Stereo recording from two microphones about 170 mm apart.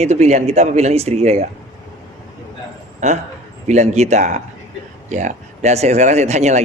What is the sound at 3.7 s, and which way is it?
Speech, 40° right (ahead or behind).